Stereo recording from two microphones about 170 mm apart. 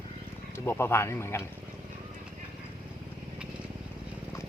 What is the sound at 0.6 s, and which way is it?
Speech, 15° left (ahead or behind).